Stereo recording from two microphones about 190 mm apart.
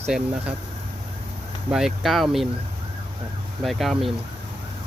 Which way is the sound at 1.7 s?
Centre (ahead or behind).